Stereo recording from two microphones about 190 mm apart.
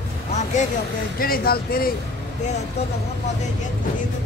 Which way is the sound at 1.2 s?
50° left (ahead or behind).